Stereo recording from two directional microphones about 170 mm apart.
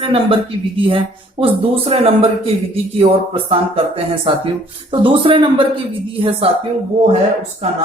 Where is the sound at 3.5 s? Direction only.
35° right (ahead or behind).